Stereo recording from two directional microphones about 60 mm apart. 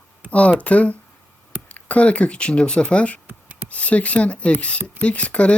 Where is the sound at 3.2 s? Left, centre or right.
Right.